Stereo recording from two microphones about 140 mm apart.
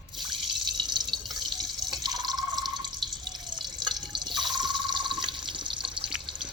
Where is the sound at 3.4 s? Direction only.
30° right (ahead or behind).